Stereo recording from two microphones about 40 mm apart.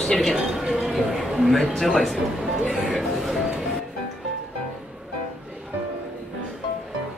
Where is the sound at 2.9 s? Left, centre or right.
Centre.